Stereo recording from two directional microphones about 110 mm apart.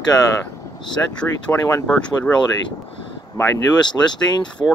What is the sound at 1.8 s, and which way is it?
Speech, 10° left (ahead or behind).